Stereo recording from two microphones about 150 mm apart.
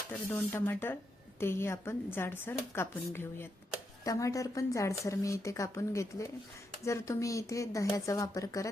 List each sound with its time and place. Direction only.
0.3 s speech: 15° left (ahead or behind)